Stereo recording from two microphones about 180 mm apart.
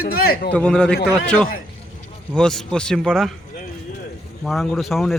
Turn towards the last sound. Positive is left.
turn(degrees=0)  # may be behind; listen again after turning